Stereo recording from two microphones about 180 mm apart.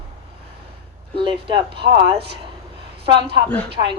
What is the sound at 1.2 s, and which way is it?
Speech, 30° right (ahead or behind).